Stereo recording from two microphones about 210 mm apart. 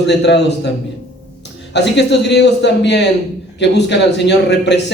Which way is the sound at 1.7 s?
55° left (ahead or behind).